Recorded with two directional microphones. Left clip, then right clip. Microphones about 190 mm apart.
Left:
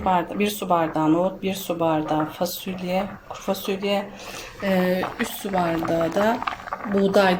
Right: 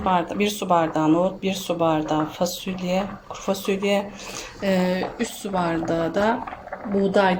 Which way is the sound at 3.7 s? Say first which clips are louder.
Right 2 dB; 15° right (ahead or behind).